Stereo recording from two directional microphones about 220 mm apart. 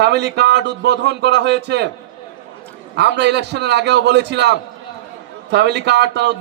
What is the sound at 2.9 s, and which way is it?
A man's voice, 50° right (ahead or behind).